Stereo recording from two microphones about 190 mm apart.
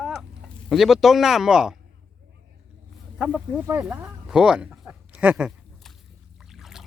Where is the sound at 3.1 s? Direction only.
5° right (ahead or behind).